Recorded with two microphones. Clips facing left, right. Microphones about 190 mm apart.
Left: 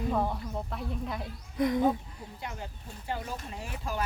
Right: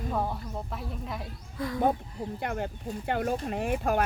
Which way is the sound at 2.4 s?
60° right (ahead or behind).